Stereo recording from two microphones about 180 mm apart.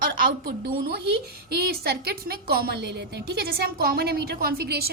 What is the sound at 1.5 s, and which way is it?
A woman's voice, 60° right (ahead or behind).